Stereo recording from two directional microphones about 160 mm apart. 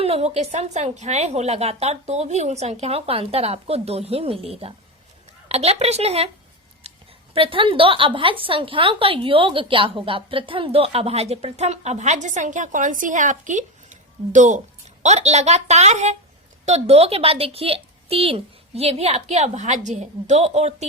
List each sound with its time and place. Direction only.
0.0 s a woman's voice: 40° right (ahead or behind)
6.8 s a sound: 40° right (ahead or behind)
7.3 s a woman's voice: 35° right (ahead or behind)